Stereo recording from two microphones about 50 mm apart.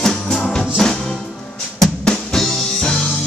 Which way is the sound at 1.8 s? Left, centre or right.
Centre.